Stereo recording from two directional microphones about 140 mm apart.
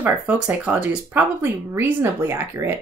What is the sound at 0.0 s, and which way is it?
Speech, 10° right (ahead or behind).